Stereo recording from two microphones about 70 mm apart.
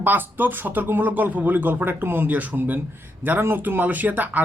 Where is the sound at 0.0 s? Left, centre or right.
Right.